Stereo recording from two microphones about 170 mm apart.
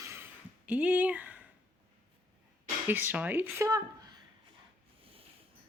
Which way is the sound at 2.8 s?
10° right (ahead or behind).